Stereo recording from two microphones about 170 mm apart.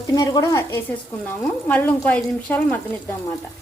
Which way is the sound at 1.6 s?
10° left (ahead or behind).